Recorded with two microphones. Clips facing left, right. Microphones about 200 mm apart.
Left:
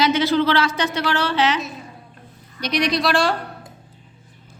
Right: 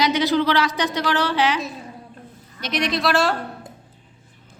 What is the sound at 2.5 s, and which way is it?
Speech, centre (ahead or behind).